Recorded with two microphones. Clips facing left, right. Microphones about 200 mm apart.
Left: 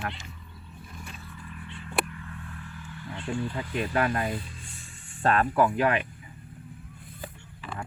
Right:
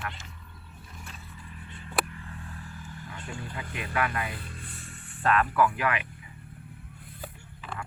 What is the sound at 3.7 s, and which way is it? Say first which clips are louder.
Speech: left 4 dB; 35° left (ahead or behind).